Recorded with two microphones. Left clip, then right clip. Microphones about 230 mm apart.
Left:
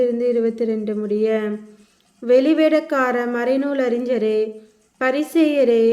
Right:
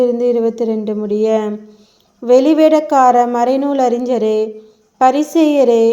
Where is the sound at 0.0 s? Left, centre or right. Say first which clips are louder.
Right 5 dB; centre.